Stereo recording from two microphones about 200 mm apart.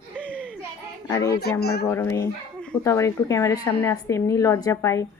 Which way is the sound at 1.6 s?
50° left (ahead or behind).